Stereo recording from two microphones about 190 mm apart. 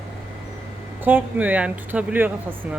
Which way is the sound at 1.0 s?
10° right (ahead or behind).